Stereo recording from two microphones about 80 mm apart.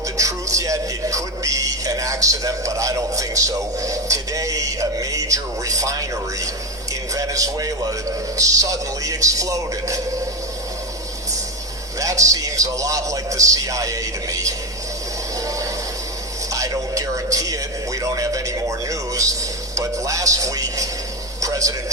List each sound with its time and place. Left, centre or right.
0.2 s a man's voice: right
11.9 s a man's voice: right
15.4 s music: right
16.5 s a man's voice: right
21.4 s a sound: right